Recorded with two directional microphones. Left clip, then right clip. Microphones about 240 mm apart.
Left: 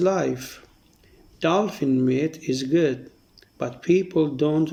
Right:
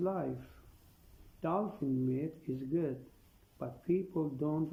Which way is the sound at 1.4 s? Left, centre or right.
Left.